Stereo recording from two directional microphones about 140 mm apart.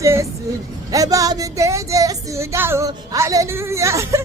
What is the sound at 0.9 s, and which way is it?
Music, 25° right (ahead or behind).